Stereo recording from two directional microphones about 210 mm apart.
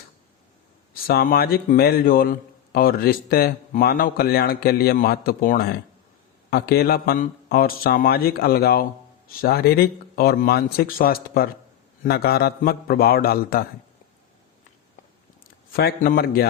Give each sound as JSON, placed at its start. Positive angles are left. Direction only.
{"t": 1.0, "sound": "speech", "side_deg": 45}
{"t": 15.7, "sound": "speech", "side_deg": 45}